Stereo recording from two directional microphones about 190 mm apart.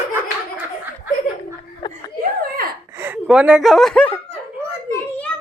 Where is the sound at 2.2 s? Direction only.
50° right (ahead or behind).